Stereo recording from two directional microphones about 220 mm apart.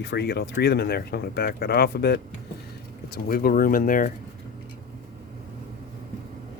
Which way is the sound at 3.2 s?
40° left (ahead or behind).